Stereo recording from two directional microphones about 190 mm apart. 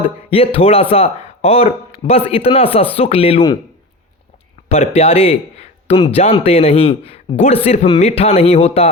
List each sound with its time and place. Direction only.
0.2 s speech: 30° left (ahead or behind)
4.9 s speech: 30° left (ahead or behind)